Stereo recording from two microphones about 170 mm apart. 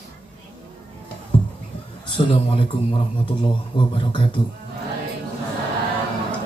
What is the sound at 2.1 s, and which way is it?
Speech, 30° left (ahead or behind).